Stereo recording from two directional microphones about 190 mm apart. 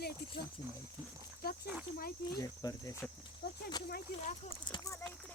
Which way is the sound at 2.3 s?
20° left (ahead or behind).